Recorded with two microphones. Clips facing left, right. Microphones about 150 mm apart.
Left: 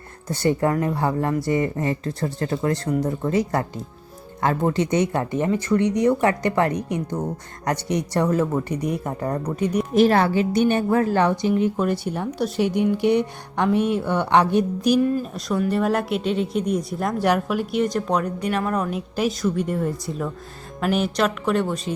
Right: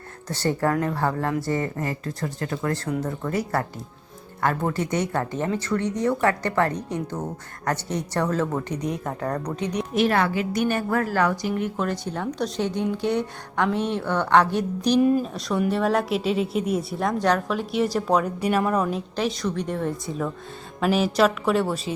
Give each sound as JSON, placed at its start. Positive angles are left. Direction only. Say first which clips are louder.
{"t": 0.3, "sound": "a woman's voice", "louder": "left 3 dB", "side_deg": 15}
{"t": 8.7, "sound": "speech", "louder": "left 3 dB", "side_deg": 60}
{"t": 9.0, "sound": "speech", "louder": "left 2 dB", "side_deg": 10}
{"t": 9.9, "sound": "a woman's voice", "louder": "left 4 dB", "side_deg": 35}
{"t": 18.8, "sound": "a woman's voice", "louder": "left 1 dB", "side_deg": 5}